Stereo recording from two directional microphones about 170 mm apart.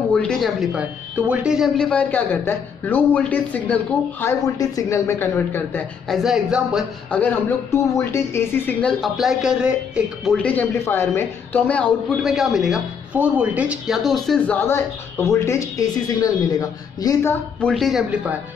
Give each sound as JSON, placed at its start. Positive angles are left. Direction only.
{"t": 0.1, "sound": "speech", "side_deg": 5}
{"t": 6.0, "sound": "speech", "side_deg": 0}
{"t": 7.2, "sound": "speech", "side_deg": 10}
{"t": 9.0, "sound": "speech", "side_deg": 0}